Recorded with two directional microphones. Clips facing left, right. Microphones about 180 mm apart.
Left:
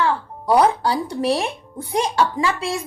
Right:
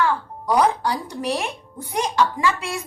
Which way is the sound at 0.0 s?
30° left (ahead or behind).